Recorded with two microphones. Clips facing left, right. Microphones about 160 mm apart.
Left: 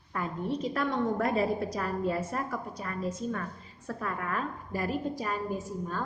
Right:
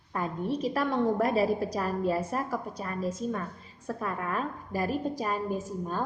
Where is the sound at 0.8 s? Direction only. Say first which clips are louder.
Right 3 dB; 35° right (ahead or behind).